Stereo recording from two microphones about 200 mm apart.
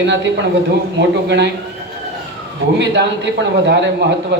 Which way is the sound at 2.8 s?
60° right (ahead or behind).